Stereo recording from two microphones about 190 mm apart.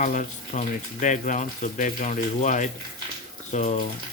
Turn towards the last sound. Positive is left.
turn(degrees=40)  # may be behind; listen again after turning